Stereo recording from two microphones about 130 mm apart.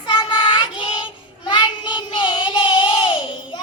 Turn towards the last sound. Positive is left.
turn(degrees=40)  # may be behind; listen again after turning